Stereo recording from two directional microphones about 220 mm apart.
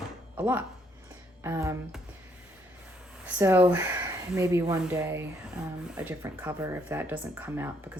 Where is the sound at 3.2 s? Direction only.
10° right (ahead or behind).